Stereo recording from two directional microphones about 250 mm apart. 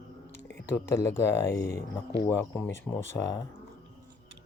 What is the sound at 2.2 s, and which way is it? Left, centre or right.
Speech, centre.